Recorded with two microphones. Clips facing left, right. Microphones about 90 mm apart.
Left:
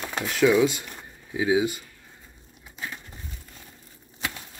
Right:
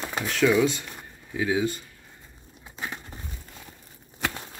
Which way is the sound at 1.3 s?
15° left (ahead or behind).